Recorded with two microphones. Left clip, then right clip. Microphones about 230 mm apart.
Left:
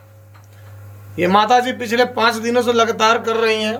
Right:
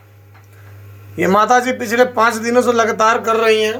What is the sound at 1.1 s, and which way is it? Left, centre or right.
A man's voice, centre.